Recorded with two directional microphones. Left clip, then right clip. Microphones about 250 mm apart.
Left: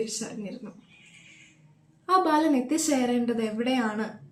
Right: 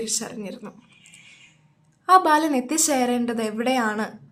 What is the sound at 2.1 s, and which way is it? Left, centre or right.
Speech, right.